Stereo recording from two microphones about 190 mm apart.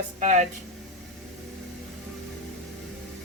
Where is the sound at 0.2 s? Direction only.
40° right (ahead or behind).